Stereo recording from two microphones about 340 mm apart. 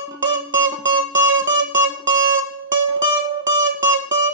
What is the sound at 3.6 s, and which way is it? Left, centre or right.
Music, right.